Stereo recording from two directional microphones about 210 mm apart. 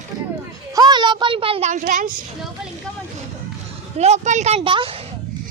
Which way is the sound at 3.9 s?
30° right (ahead or behind).